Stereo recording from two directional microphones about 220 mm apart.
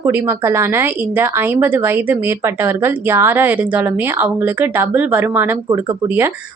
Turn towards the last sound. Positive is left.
turn(degrees=-10)  # may be behind; listen again after turning